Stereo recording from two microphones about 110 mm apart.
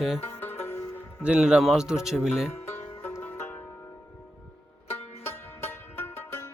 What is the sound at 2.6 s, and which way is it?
Music, 20° left (ahead or behind).